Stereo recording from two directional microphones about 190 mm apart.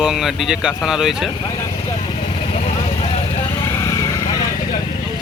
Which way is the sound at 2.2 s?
35° left (ahead or behind).